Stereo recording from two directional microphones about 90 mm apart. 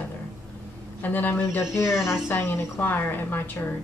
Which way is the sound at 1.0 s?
20° left (ahead or behind).